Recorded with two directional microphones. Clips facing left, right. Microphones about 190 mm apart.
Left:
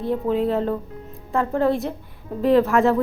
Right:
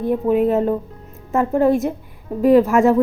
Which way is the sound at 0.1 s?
15° right (ahead or behind).